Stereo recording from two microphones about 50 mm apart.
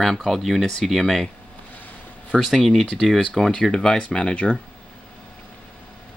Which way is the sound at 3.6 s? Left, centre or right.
Centre.